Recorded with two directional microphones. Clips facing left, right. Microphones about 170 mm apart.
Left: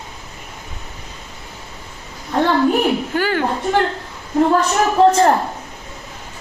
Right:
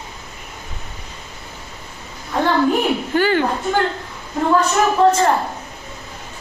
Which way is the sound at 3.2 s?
5° left (ahead or behind).